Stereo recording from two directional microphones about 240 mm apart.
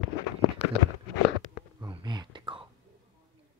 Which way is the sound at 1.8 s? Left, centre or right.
Centre.